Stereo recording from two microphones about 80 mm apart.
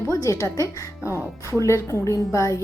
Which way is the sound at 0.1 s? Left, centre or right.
Left.